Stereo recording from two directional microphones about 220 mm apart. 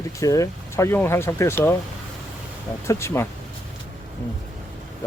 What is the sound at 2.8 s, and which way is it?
Speech, 10° left (ahead or behind).